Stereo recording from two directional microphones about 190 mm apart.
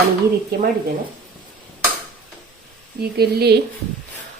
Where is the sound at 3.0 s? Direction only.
55° right (ahead or behind).